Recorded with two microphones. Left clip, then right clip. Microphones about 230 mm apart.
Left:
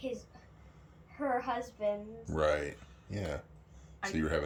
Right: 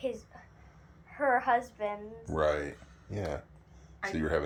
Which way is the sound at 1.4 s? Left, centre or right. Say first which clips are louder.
Right 6 dB; centre.